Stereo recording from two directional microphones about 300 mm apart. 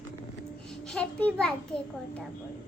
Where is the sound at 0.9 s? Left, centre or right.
Centre.